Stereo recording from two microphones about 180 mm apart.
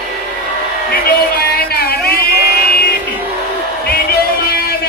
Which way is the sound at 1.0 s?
60° left (ahead or behind).